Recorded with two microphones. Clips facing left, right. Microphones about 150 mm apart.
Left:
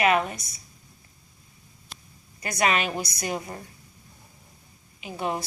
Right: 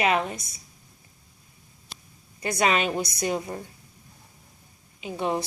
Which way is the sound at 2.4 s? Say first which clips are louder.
Right 1 dB; 25° right (ahead or behind).